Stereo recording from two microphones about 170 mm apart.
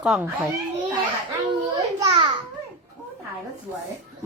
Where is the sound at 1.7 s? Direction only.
25° right (ahead or behind).